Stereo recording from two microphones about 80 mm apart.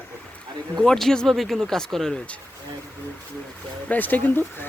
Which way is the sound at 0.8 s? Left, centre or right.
Centre.